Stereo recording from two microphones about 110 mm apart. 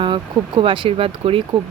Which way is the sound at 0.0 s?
45° right (ahead or behind).